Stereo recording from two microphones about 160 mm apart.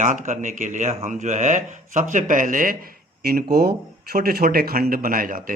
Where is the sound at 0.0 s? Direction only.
55° right (ahead or behind).